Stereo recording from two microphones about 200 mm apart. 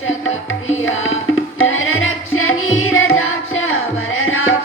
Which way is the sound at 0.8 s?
80° left.